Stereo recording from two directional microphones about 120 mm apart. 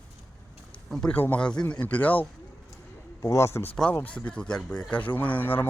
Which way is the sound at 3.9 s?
10° left (ahead or behind).